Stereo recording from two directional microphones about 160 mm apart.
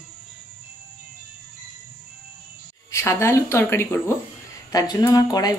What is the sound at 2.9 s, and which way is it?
A woman's voice, 15° left (ahead or behind).